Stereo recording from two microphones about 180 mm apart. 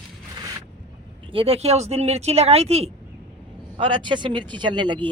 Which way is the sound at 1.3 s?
35° right (ahead or behind).